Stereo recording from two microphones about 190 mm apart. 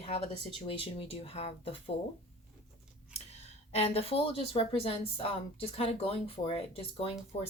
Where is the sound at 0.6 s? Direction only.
30° left (ahead or behind).